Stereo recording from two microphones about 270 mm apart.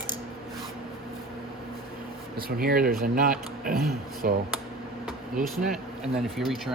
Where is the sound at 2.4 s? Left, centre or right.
Right.